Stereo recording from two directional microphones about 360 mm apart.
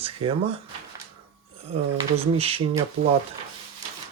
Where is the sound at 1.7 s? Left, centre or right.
Centre.